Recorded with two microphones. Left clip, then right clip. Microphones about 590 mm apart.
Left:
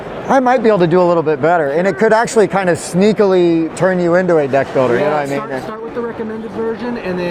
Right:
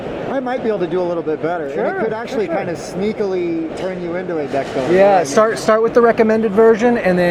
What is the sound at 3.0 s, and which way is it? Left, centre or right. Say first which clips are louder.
Speech: left 8 dB; left.